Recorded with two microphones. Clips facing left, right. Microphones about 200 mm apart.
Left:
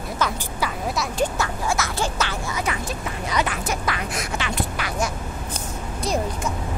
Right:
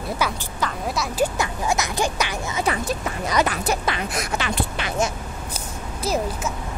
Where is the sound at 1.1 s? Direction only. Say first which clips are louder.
Right 3 dB; 10° right (ahead or behind).